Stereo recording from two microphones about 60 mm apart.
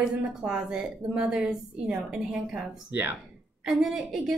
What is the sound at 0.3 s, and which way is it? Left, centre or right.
Speech, centre.